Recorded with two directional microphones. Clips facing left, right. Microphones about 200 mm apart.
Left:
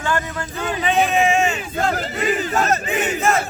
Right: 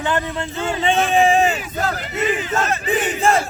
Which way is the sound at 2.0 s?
40° left (ahead or behind).